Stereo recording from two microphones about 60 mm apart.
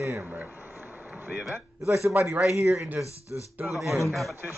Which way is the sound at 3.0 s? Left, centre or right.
Left.